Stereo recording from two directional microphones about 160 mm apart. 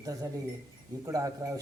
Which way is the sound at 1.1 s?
20° right (ahead or behind).